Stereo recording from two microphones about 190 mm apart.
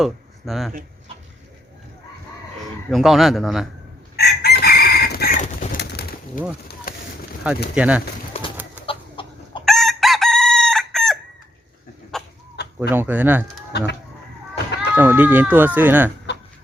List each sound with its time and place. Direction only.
0.0 s speech: centre (ahead or behind)
0.7 s a sound: 40° right (ahead or behind)
2.9 s a man's voice: centre (ahead or behind)
4.2 s chicken: 55° left (ahead or behind)
6.9 s a sound: 50° left (ahead or behind)
7.4 s speech: 5° right (ahead or behind)
8.3 s run: 30° left (ahead or behind)
8.9 s chicken: 25° left (ahead or behind)
9.6 s chicken: centre (ahead or behind)
12.6 s chicken: 65° left (ahead or behind)
12.9 s speech: 10° right (ahead or behind)
13.7 s speech: 65° left (ahead or behind)
14.8 s speech: 10° right (ahead or behind)